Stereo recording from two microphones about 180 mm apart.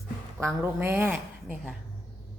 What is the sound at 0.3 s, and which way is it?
A woman's voice, 15° right (ahead or behind).